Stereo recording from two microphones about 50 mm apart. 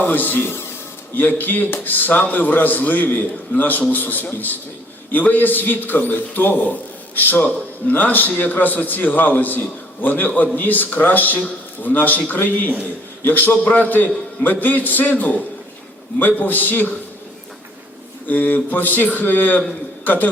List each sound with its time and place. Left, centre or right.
0.0 s speech: left
1.1 s a man's voice: left
18.3 s a man's voice: left